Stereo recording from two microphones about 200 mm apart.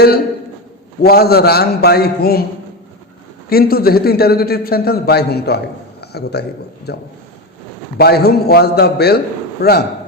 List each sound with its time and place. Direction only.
1.0 s a man's voice: 50° left (ahead or behind)
3.5 s a man's voice: 50° left (ahead or behind)
6.0 s a sound: 55° left (ahead or behind)
6.9 s a man's voice: 55° left (ahead or behind)